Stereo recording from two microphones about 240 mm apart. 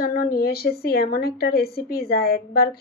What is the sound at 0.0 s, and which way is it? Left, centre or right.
A woman's voice, left.